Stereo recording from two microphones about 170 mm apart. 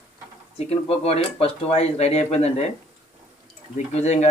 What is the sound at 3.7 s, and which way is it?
Speech, 40° left (ahead or behind).